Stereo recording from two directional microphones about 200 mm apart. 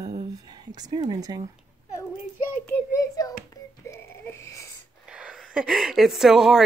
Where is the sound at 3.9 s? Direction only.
10° left (ahead or behind).